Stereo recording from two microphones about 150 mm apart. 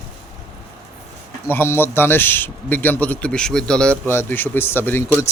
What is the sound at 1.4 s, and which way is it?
Speech, 15° left (ahead or behind).